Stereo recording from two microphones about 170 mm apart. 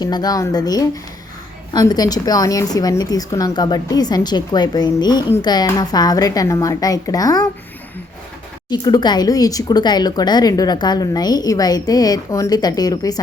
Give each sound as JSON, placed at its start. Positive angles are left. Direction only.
{"t": 0.0, "sound": "speech", "side_deg": 25}
{"t": 8.7, "sound": "speech", "side_deg": 25}